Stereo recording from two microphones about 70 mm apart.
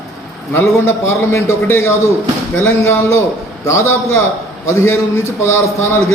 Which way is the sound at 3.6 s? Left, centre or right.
Left.